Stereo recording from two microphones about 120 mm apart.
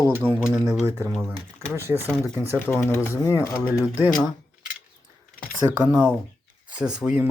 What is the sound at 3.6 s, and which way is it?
Speech, 15° right (ahead or behind).